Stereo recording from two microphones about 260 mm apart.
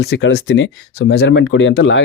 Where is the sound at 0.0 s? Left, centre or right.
Left.